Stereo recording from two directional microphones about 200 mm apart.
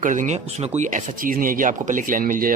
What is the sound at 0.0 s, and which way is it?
Speech, 40° right (ahead or behind).